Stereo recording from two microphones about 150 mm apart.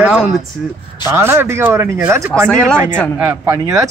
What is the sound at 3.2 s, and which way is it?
Speech, 15° right (ahead or behind).